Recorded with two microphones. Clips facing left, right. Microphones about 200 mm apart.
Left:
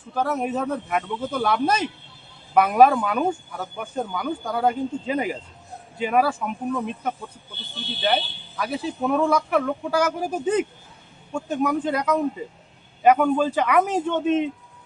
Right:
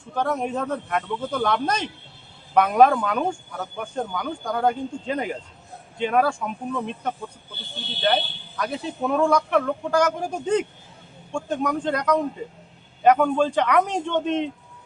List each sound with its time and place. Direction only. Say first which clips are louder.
0.1 s a man's voice: even; 5° left (ahead or behind)